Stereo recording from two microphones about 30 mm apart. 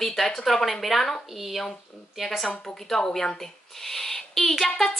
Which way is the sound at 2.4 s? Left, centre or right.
Left.